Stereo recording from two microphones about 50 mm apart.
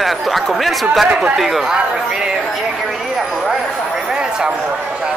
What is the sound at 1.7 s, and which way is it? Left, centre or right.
Speech, centre.